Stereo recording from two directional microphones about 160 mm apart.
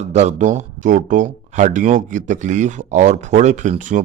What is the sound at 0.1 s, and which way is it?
Speech, 45° right (ahead or behind).